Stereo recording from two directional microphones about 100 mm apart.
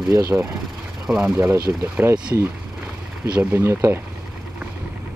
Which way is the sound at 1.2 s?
10° right (ahead or behind).